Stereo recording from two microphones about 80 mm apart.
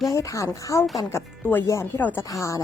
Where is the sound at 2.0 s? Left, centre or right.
Left.